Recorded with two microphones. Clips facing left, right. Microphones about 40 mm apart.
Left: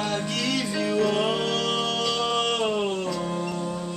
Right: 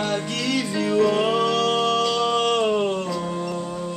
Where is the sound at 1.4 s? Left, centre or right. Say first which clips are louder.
Right 5 dB; right.